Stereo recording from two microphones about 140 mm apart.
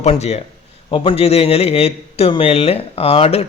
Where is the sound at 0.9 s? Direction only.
40° left (ahead or behind).